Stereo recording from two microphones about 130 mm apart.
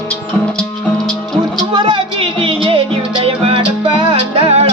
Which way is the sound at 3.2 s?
45° right (ahead or behind).